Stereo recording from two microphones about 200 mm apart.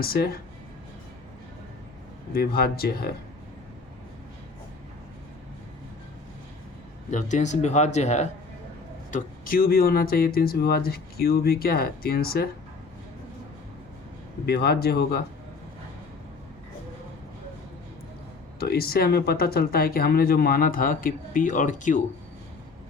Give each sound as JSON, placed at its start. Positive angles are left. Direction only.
{"t": 0.0, "sound": "speech", "side_deg": 50}
{"t": 2.6, "sound": "speech", "side_deg": 50}
{"t": 7.1, "sound": "speech", "side_deg": 40}
{"t": 9.1, "sound": "speech", "side_deg": 45}
{"t": 14.4, "sound": "speech", "side_deg": 55}
{"t": 18.6, "sound": "speech", "side_deg": 50}